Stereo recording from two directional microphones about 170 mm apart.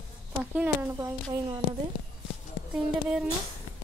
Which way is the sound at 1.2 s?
25° right (ahead or behind).